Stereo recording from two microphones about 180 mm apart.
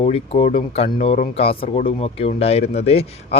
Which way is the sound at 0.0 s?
35° left (ahead or behind).